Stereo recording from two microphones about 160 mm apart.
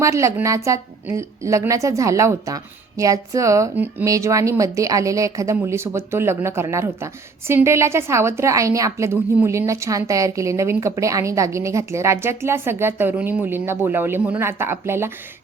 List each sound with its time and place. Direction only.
0.0 s a woman's voice: 20° right (ahead or behind)